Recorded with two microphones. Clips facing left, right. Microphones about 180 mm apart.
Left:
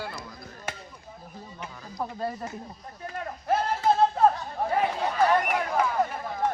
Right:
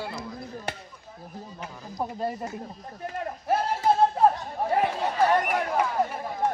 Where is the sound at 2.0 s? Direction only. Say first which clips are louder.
Right 2 dB; 15° right (ahead or behind).